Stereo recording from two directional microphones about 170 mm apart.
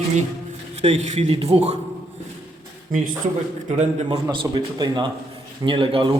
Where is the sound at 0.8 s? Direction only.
40° right (ahead or behind).